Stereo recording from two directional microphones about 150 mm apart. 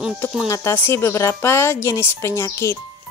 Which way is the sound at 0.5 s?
15° left (ahead or behind).